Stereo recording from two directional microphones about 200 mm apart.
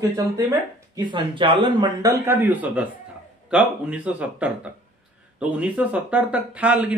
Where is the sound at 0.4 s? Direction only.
15° right (ahead or behind).